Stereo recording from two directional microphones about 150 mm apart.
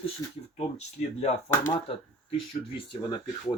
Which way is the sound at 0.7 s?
50° left (ahead or behind).